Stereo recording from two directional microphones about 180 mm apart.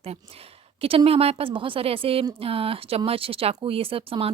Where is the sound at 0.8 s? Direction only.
30° right (ahead or behind).